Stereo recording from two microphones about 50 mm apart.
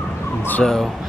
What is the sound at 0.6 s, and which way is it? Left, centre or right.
Speech, centre.